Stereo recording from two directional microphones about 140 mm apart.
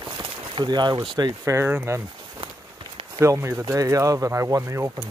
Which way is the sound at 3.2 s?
20° right (ahead or behind).